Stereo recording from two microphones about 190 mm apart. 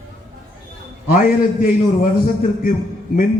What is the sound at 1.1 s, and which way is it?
A man's voice, 45° left (ahead or behind).